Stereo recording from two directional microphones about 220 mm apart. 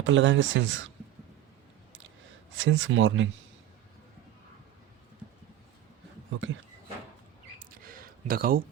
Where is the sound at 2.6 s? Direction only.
60° right (ahead or behind).